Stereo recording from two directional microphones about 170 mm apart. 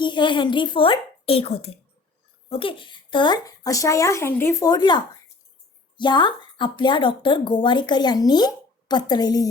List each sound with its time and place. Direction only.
0.0 s speech: 25° left (ahead or behind)